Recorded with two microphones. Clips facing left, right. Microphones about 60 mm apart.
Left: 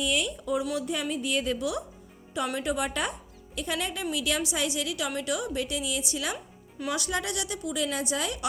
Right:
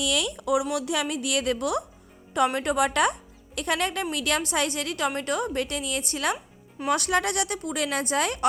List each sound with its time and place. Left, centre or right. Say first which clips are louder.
0.0 s a woman's voice: right 2 dB; right